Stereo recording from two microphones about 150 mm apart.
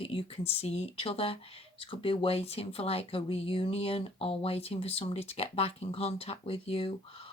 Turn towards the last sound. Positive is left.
turn(degrees=40)  # may be behind; listen again after turning